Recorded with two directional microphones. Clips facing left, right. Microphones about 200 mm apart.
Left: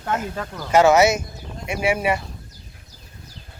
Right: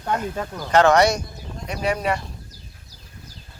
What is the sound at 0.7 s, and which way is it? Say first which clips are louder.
A man's voice: left 1 dB; 5° left (ahead or behind).